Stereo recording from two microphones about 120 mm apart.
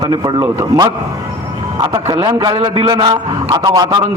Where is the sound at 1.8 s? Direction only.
35° right (ahead or behind).